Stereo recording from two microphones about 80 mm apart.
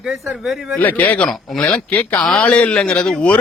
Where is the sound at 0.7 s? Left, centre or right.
Left.